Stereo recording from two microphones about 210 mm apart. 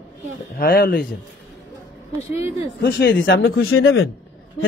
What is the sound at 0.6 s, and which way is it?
Speech, 45° left (ahead or behind).